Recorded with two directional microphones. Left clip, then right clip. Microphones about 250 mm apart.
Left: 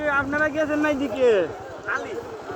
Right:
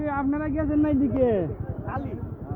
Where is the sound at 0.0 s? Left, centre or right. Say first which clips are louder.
Left 5 dB; centre.